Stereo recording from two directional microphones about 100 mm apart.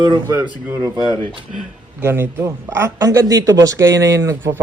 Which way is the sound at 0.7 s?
40° right (ahead or behind).